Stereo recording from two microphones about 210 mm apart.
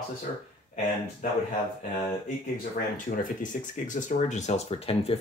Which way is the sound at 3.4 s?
40° left (ahead or behind).